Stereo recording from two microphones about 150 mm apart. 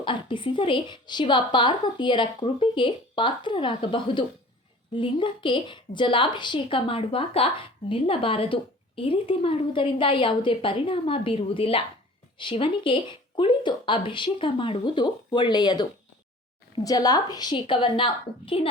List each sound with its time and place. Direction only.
0.0 s a woman's voice: 35° left (ahead or behind)